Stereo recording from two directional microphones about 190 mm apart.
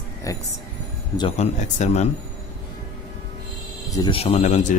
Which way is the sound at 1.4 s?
35° left (ahead or behind).